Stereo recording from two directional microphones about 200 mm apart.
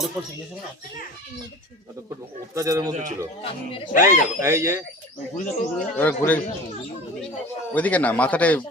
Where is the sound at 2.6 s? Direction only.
15° right (ahead or behind).